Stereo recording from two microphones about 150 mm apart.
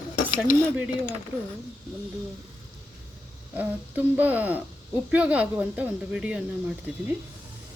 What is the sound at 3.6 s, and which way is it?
A woman's voice, 10° right (ahead or behind).